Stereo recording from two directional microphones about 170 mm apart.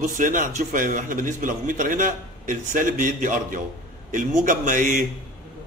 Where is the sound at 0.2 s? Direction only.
50° right (ahead or behind).